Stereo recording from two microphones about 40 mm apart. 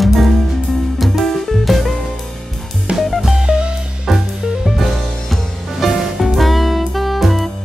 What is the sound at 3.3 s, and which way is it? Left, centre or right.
Music, centre.